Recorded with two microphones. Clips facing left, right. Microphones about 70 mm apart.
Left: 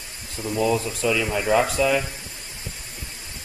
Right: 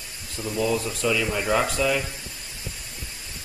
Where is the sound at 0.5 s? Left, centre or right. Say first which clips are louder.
Left 3 dB; left.